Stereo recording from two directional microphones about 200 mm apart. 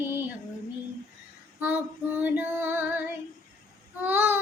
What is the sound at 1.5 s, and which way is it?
Child singing, 10° right (ahead or behind).